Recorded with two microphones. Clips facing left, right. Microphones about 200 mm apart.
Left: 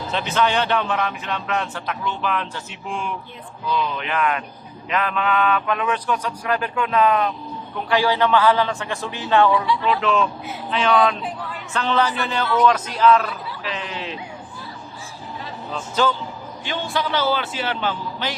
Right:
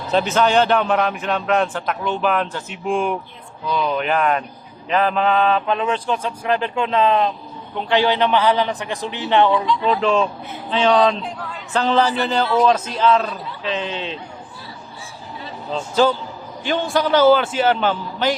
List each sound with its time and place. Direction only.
0.1 s speech: 40° right (ahead or behind); by 9.6 s 20° right (ahead or behind)
9.8 s speech: 35° right (ahead or behind)
15.7 s speech: 35° right (ahead or behind)
16.6 s speech: 45° right (ahead or behind)